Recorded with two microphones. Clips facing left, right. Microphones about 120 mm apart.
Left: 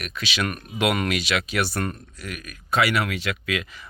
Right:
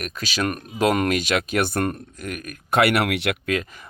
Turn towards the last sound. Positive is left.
turn(degrees=-45)  # may be behind; listen again after turning